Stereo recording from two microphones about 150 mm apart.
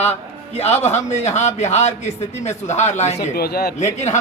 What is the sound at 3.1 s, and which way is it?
Speech, 90° left.